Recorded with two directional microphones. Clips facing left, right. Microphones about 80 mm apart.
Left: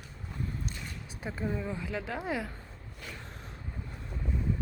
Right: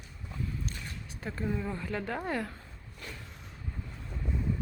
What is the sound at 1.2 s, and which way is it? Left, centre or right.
Speech, centre.